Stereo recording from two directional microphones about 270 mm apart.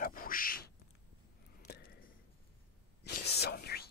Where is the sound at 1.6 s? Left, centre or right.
Left.